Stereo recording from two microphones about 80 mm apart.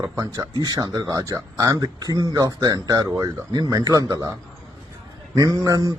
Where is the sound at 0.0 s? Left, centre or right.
Right.